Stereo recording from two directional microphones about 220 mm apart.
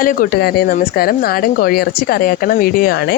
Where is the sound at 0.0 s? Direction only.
40° left (ahead or behind).